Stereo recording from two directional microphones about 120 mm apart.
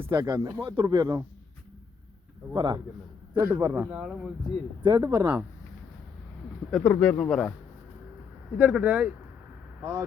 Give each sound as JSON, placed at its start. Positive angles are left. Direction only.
{"t": 0.1, "sound": "speech", "side_deg": -35}
{"t": 2.5, "sound": "speech", "side_deg": -35}
{"t": 3.4, "sound": "speech", "side_deg": -20}
{"t": 4.8, "sound": "speech", "side_deg": -35}
{"t": 6.7, "sound": "speech", "side_deg": 5}
{"t": 8.5, "sound": "speech", "side_deg": -10}